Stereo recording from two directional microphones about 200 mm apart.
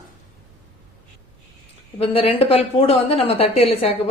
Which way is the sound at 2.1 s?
25° left (ahead or behind).